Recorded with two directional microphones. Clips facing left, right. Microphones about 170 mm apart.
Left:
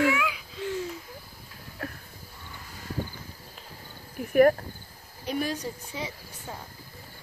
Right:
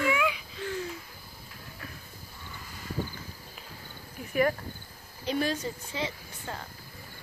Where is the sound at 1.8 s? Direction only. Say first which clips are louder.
Left 9 dB; 65° left (ahead or behind).